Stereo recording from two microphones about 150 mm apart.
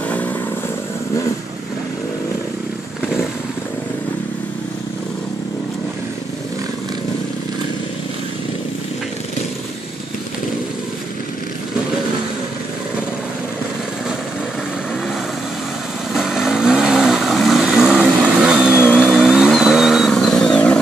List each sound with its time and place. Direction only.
16.1 s vehicle: centre (ahead or behind)